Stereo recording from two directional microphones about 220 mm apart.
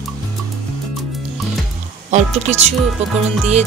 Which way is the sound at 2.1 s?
30° right (ahead or behind).